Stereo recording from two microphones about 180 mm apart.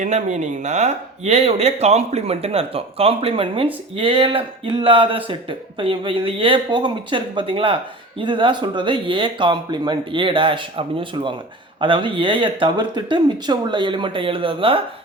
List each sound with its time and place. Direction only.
0.0 s speech: 40° right (ahead or behind)